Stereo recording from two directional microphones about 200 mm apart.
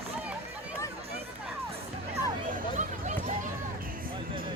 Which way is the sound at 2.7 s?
40° right (ahead or behind).